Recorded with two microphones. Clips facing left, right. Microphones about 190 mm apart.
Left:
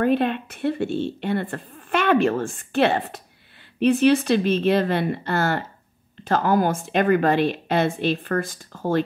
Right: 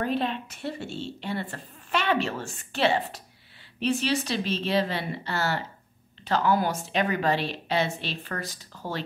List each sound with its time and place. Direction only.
0.0 s a woman's voice: 55° left (ahead or behind)